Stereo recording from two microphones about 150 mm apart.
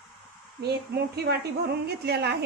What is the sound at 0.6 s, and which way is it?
A woman's voice, 90° right.